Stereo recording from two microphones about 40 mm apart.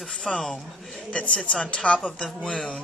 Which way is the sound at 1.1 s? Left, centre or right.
Left.